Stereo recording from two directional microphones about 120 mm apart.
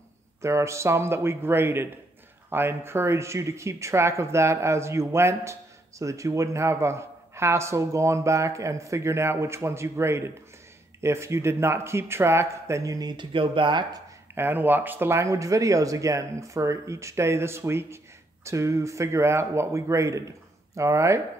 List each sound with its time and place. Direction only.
0.4 s speech: 25° right (ahead or behind); by 14.0 s 40° right (ahead or behind)
14.3 s speech: 15° right (ahead or behind)